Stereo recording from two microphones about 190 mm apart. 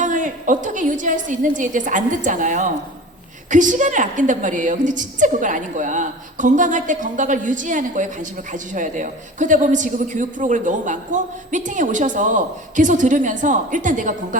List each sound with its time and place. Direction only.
0.0 s a woman's voice: 40° right (ahead or behind)